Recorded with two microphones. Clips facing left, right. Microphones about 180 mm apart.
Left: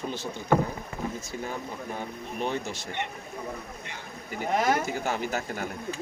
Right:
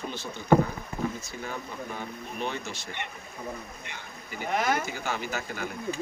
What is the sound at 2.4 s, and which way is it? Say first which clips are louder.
Speech: left 3 dB; 40° left (ahead or behind).